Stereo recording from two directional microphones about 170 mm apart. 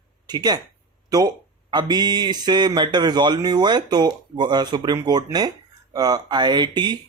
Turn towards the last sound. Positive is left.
turn(degrees=-25)  # may be behind; listen again after turning